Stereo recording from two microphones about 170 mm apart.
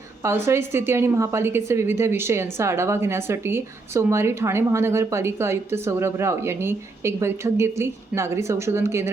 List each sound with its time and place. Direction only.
0.2 s a woman's voice: 15° right (ahead or behind)